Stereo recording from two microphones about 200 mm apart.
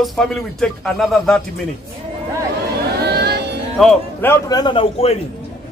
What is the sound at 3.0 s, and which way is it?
Music, 55° right (ahead or behind).